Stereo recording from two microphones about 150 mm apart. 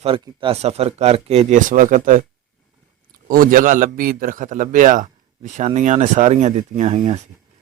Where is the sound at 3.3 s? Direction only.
70° right (ahead or behind); by 7.3 s 45° right (ahead or behind).